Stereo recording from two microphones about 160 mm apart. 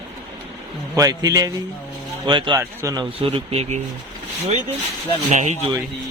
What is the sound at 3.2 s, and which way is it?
Speech, 35° right (ahead or behind).